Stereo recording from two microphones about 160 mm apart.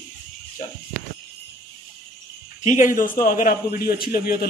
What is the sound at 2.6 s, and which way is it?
A man's voice, 50° left (ahead or behind).